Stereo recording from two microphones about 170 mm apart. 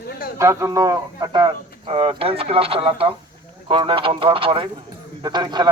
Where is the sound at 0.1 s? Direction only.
60° left (ahead or behind).